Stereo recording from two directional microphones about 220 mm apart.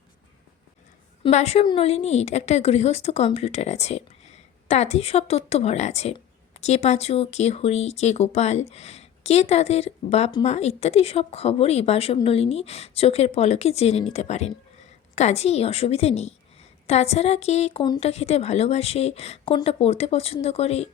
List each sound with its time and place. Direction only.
1.2 s a woman's voice: 30° left (ahead or behind)